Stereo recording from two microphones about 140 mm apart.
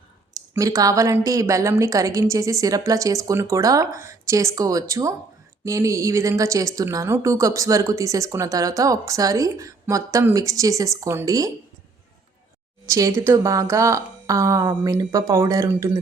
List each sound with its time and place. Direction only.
0.3 s speech: 25° right (ahead or behind)
12.8 s speech: 25° right (ahead or behind)